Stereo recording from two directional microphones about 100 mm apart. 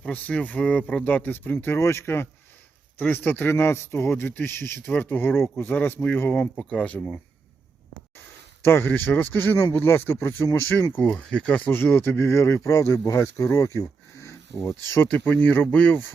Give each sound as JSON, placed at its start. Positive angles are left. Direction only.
{"t": 0.0, "sound": "a man's voice", "side_deg": 15}
{"t": 8.6, "sound": "a man's voice", "side_deg": 20}
{"t": 13.7, "sound": "a sound", "side_deg": 30}
{"t": 14.9, "sound": "speech", "side_deg": 20}